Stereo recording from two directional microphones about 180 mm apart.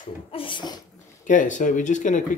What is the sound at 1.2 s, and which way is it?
Speech, 45° left (ahead or behind).